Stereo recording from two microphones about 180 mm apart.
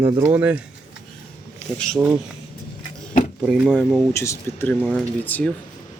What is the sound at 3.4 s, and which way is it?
Speech, centre (ahead or behind).